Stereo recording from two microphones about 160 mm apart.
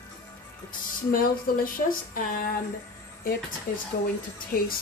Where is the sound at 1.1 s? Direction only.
65° left (ahead or behind).